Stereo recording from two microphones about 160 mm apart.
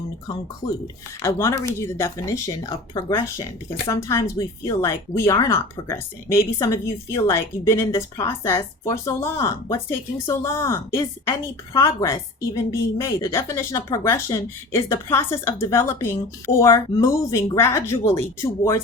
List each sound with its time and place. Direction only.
1.2 s speech: 15° left (ahead or behind)